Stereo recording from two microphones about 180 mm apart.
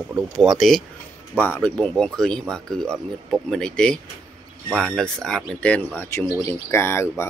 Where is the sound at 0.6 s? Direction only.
Centre (ahead or behind).